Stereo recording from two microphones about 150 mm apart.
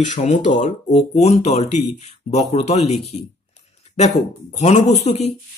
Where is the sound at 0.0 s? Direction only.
50° left (ahead or behind).